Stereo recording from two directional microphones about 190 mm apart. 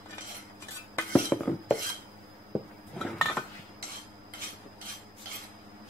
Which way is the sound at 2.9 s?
Centre (ahead or behind).